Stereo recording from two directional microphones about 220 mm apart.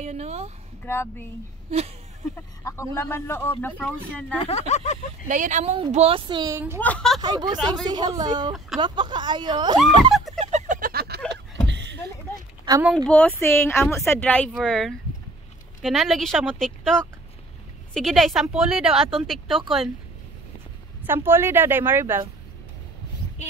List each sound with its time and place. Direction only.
0.0 s a woman's voice: 30° right (ahead or behind)
0.8 s a man's voice: 10° left (ahead or behind)
2.6 s a man's voice: 10° left (ahead or behind)
4.5 s speech: 30° left (ahead or behind)
5.3 s a woman's voice: 35° right (ahead or behind); by 6.6 s 20° right (ahead or behind)
6.8 s speech: 5° left (ahead or behind)
7.2 s a woman's voice: 20° right (ahead or behind)
10.1 s fowl: centre (ahead or behind)
10.4 s a sound: 35° right (ahead or behind); by 12.0 s 55° right (ahead or behind)
12.6 s speech: 15° right (ahead or behind)
12.9 s a man's voice: 5° left (ahead or behind)
21.0 s a woman's voice: 10° right (ahead or behind)